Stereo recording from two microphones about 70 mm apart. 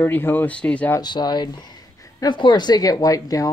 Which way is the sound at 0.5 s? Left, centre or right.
Centre.